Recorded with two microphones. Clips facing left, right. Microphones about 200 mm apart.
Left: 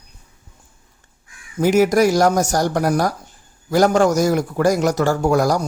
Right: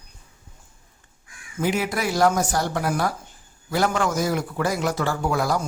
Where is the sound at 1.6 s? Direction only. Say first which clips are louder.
Left 10 dB; 40° left (ahead or behind).